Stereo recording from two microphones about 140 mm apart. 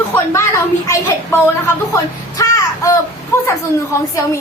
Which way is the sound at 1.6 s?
20° left (ahead or behind).